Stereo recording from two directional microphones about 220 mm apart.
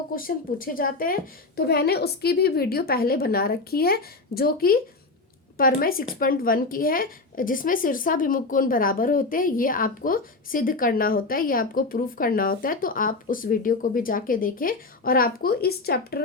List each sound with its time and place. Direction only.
0.1 s a woman's voice: 40° left (ahead or behind)